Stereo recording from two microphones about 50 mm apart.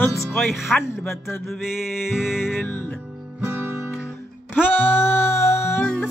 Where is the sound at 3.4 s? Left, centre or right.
Right.